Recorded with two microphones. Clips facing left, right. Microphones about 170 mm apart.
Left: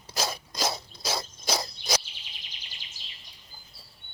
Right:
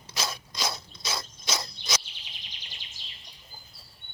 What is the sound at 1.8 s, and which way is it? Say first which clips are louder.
Bird vocalization: left 6 dB; centre (ahead or behind).